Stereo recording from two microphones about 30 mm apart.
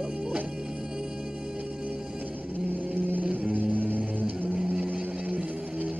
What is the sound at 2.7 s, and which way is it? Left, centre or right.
Vehicle, right.